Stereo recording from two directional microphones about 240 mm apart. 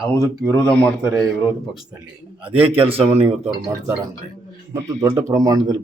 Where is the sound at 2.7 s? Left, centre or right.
Right.